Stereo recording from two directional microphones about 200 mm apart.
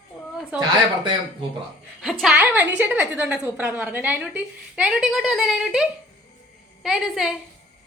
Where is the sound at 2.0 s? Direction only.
Centre (ahead or behind).